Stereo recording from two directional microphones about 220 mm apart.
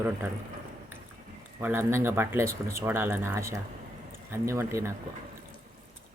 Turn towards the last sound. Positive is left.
turn(degrees=-10)  # may be behind; listen again after turning